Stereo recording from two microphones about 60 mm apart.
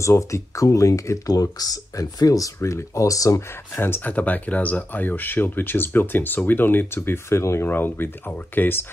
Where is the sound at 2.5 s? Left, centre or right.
Left.